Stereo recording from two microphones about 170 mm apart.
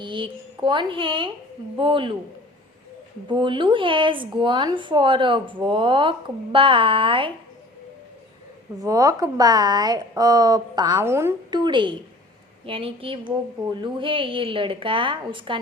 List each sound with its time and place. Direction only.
0.0 s a woman's voice: 30° right (ahead or behind)
3.2 s a woman's voice: 30° right (ahead or behind)
8.8 s a woman's voice: 20° right (ahead or behind)
11.5 s a woman's voice: 25° right (ahead or behind)